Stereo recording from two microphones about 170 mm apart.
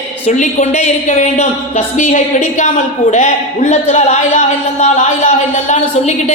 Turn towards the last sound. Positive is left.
turn(degrees=40)  # may be behind; listen again after turning